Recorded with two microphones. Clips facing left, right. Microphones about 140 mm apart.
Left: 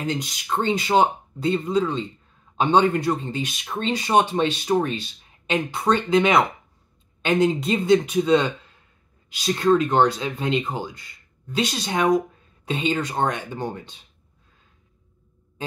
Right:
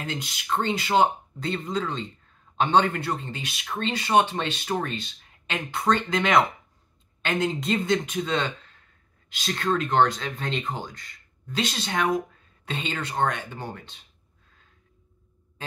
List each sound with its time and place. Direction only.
0.0 s speech: 15° left (ahead or behind)